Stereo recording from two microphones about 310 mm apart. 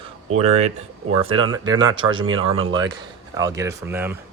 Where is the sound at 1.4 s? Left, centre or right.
Centre.